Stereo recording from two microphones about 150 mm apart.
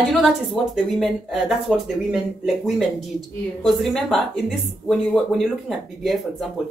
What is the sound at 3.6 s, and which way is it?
A woman's voice, centre (ahead or behind).